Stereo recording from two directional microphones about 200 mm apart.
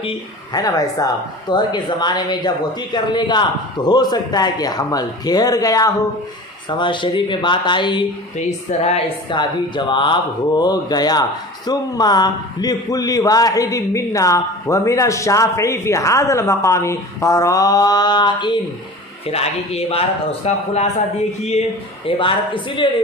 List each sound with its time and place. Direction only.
0.5 s speech: 20° left (ahead or behind)
8.4 s a man's voice: 35° left (ahead or behind)
22.0 s speech: 25° left (ahead or behind)